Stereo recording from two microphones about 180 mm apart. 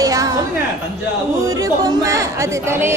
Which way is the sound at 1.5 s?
20° right (ahead or behind).